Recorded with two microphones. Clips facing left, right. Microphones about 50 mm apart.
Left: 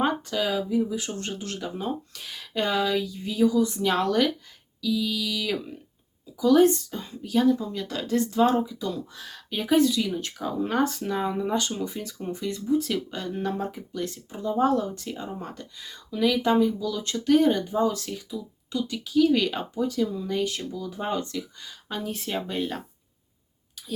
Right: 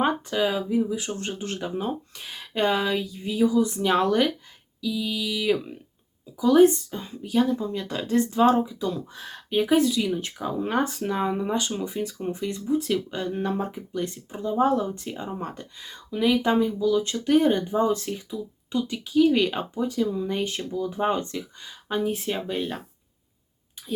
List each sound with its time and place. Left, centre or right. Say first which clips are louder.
0.0 s speech: right 2 dB; centre
9.1 s speech: right 3 dB; right
9.5 s speech: right 1 dB; centre
14.3 s speech: right 1 dB; centre
17.7 s speech: right 2 dB; right
19.1 s speech: right 1 dB; centre
20.3 s speech: even; right; by 22.8 s centre